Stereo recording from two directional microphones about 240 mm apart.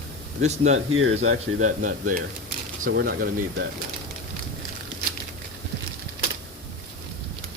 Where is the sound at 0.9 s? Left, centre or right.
Right.